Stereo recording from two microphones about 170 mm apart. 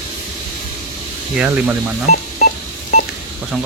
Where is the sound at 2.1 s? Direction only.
45° left (ahead or behind).